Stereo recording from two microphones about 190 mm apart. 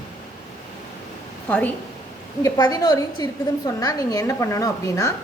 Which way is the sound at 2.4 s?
20° left (ahead or behind).